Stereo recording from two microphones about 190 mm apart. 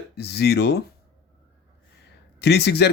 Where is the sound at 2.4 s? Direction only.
60° left (ahead or behind).